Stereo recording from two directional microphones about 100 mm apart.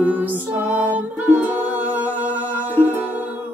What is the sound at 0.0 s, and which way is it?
Music, 15° right (ahead or behind).